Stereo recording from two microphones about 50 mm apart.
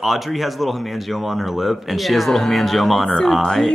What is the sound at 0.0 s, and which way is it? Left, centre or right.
Speech, centre.